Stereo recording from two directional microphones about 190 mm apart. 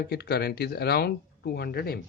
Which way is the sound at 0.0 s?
60° left (ahead or behind).